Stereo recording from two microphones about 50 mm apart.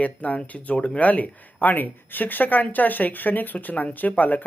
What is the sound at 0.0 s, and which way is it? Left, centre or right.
Speech, left.